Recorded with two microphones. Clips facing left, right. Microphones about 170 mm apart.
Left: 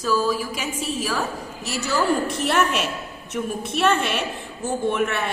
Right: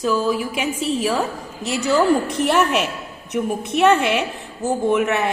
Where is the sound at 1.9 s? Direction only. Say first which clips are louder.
Right 5 dB; 20° right (ahead or behind).